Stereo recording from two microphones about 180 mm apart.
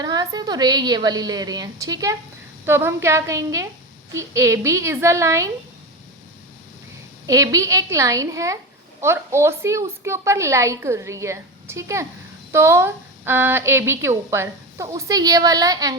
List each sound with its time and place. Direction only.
0.0 s a woman's voice: 20° right (ahead or behind)
7.3 s speech: 20° right (ahead or behind)